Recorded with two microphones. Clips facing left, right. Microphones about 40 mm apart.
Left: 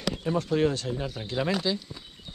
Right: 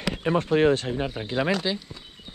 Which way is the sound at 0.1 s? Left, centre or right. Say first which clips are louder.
Right 4 dB; right.